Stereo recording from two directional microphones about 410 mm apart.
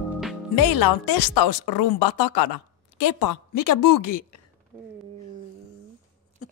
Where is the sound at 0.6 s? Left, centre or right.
Left.